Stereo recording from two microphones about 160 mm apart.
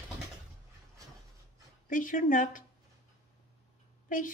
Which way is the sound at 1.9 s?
55° left (ahead or behind).